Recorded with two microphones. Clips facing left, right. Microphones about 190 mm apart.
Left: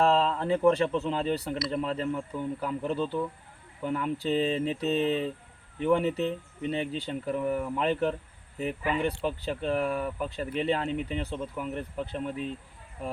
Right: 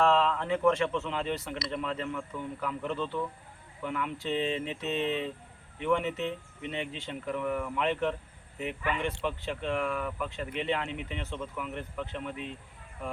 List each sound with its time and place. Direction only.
0.0 s speech: 35° left (ahead or behind)